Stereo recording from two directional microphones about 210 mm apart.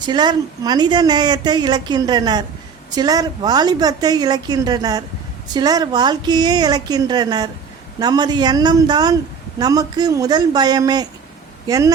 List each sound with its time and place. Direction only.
0.0 s a woman's voice: 20° right (ahead or behind)